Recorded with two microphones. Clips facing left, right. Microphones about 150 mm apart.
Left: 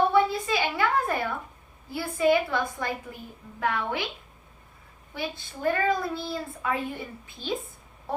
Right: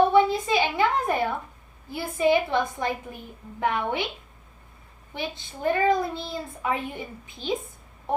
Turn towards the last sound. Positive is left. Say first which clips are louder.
# right 3 dB
turn(degrees=-20)  # may be behind; listen again after turning